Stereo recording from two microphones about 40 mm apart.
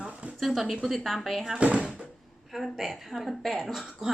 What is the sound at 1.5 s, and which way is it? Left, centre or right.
Speech, right.